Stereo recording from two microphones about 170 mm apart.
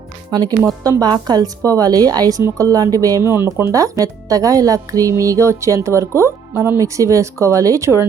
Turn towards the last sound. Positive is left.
turn(degrees=-15)  # may be behind; listen again after turning